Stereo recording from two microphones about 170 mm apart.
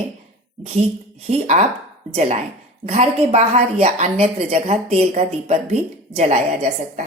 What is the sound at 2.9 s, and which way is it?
A woman's voice, 40° right (ahead or behind).